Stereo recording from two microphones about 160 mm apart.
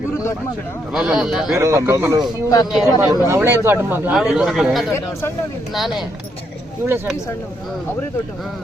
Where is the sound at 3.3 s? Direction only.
15° right (ahead or behind).